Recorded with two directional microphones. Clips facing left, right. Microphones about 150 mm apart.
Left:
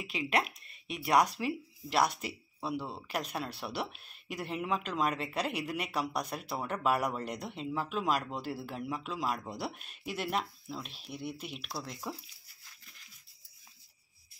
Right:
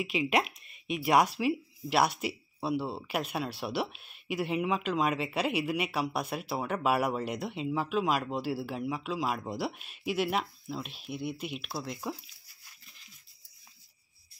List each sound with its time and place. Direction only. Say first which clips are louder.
0.1 s speech: right 1 dB; 10° right (ahead or behind)
0.7 s a sound: right 7 dB; 35° left (ahead or behind)
1.0 s speech: right 2 dB; 10° right (ahead or behind)